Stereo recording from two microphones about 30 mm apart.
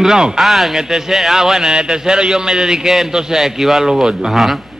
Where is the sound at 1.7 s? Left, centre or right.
Right.